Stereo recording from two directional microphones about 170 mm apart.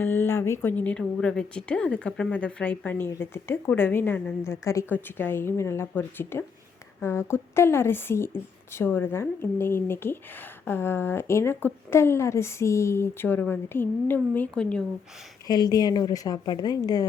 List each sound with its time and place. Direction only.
0.0 s a woman's voice: 15° left (ahead or behind)
15.4 s a woman's voice: 25° left (ahead or behind)